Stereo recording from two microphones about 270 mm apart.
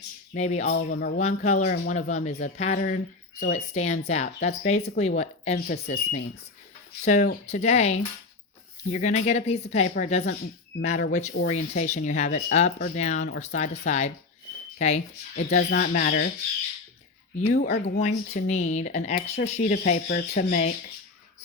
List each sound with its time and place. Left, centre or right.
0.3 s speech: left
15.5 s speech: left
17.3 s speech: left